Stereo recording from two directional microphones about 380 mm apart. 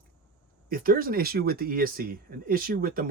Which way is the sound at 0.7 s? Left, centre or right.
Right.